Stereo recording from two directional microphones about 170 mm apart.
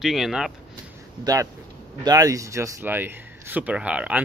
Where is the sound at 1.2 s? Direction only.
20° right (ahead or behind).